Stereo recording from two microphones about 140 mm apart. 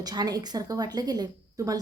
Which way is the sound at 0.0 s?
30° right (ahead or behind).